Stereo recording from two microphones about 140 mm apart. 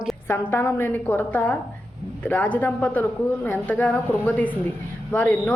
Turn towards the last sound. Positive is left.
turn(degrees=10)  # may be behind; listen again after turning